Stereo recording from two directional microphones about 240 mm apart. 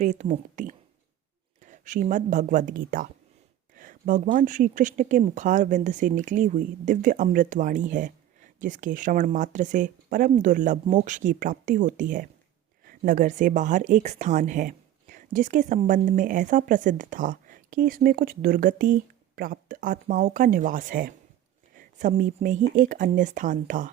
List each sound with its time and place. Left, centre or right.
0.0 s speech: right